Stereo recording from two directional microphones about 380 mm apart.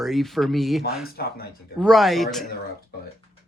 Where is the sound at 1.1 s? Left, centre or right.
Left.